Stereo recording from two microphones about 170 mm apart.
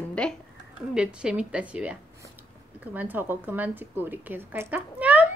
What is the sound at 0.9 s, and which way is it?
A woman's voice, 5° right (ahead or behind).